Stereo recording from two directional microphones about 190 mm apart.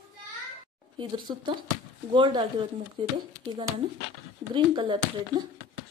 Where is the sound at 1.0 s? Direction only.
25° right (ahead or behind).